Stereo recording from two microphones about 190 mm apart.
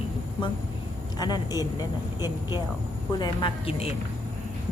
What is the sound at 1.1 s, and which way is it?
A woman's voice, 20° left (ahead or behind).